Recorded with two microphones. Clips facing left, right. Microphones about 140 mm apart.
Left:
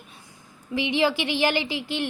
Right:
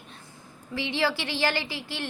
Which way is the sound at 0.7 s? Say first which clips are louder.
Left 5 dB; 15° left (ahead or behind).